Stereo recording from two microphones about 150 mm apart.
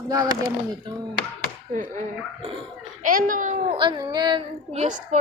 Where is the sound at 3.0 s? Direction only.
65° right (ahead or behind).